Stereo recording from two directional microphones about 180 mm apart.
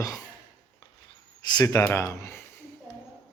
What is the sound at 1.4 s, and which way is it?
Speech, 20° left (ahead or behind).